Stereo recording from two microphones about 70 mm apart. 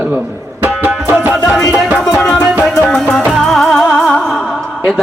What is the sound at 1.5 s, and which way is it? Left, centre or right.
Speech, centre.